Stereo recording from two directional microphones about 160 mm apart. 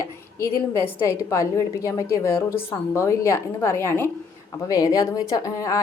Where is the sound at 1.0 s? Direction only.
20° left (ahead or behind).